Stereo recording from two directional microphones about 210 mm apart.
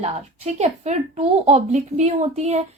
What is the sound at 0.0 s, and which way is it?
A woman's voice, 30° right (ahead or behind).